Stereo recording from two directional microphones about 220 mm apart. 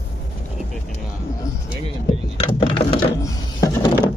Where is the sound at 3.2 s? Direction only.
15° left (ahead or behind).